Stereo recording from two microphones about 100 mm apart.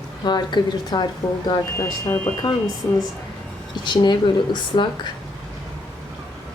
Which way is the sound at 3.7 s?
50° left (ahead or behind).